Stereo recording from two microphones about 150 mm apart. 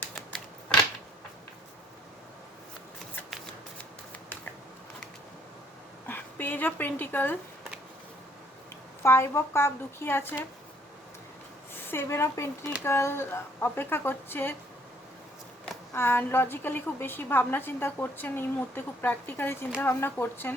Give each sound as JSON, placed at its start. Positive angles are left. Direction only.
{"t": 0.0, "sound": "scissors", "side_deg": 5}
{"t": 3.2, "sound": "shuffling cards", "side_deg": 5}
{"t": 6.1, "sound": "speech", "side_deg": 15}
{"t": 9.0, "sound": "a woman's voice", "side_deg": 15}
{"t": 11.7, "sound": "a woman's voice", "side_deg": 15}
{"t": 15.9, "sound": "a woman's voice", "side_deg": 15}